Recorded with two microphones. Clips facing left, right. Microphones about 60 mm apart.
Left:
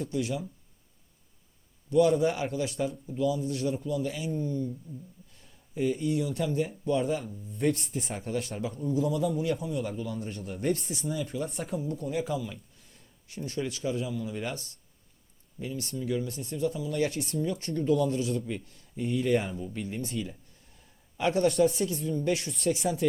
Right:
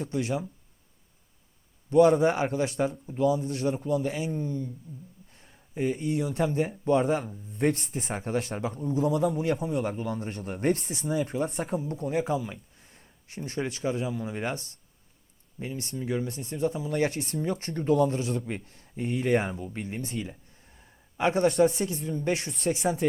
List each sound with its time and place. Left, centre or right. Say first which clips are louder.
0.1 s a man's voice: right 4 dB; right
1.9 s a man's voice: right 3 dB; right
5.3 s a sound: right 1 dB; right
6.2 s speech: right 3 dB; right
9.0 s speech: right 6 dB; right
9.4 s a man's voice: right 3 dB; right
10.8 s speech: right 4 dB; right
11.4 s speech: right 4 dB; right
11.9 s a man's voice: right 2 dB; right
16.4 s speech: right 1 dB; right
16.6 s a man's voice: right 2 dB; right
21.4 s speech: right 2 dB; right
22.2 s a man's voice: right 2 dB; right
22.8 s speech: right 2 dB; right